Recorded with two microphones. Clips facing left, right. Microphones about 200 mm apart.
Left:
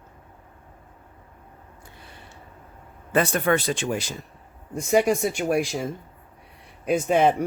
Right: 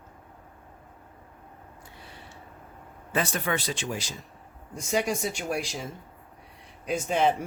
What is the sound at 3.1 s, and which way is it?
Speech, 55° left (ahead or behind).